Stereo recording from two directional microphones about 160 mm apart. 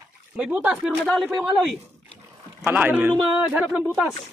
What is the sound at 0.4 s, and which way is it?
A man's voice, 5° right (ahead or behind).